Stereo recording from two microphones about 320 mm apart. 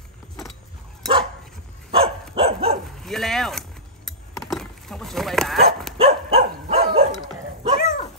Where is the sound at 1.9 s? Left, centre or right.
Centre.